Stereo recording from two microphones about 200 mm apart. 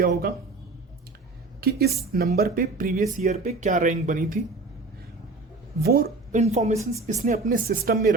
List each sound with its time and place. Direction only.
0.0 s speech: 50° right (ahead or behind)
1.6 s speech: 50° right (ahead or behind)
5.8 s speech: 50° right (ahead or behind)
6.3 s speech: 35° right (ahead or behind)